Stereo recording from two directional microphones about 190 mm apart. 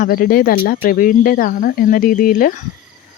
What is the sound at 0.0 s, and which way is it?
Speech, 50° left (ahead or behind).